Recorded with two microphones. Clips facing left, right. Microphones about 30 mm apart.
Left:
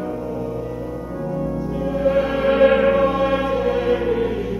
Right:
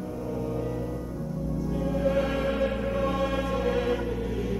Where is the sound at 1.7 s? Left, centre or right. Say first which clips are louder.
Left 7 dB; left.